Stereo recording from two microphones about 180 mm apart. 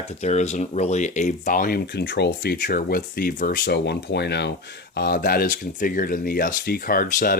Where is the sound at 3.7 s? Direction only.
70° left (ahead or behind).